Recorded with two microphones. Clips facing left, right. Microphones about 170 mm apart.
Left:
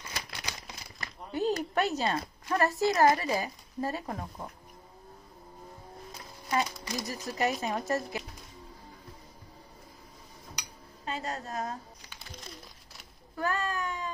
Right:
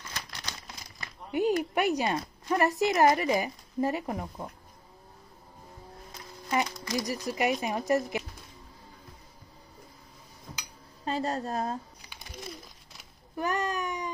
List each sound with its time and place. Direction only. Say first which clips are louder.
0.1 s crumpling: left 2 dB; 10° left (ahead or behind)
1.3 s a woman's voice: right 3 dB; 15° right (ahead or behind)
6.5 s a woman's voice: right 2 dB; 15° right (ahead or behind)
11.1 s a woman's voice: right 6 dB; 35° right (ahead or behind)
13.4 s a sound: right 2 dB; 20° right (ahead or behind)